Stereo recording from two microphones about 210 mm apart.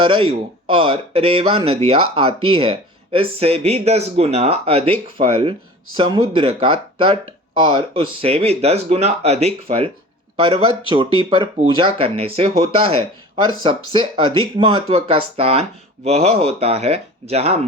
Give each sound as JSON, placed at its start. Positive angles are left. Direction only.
{"t": 0.0, "sound": "speech", "side_deg": -25}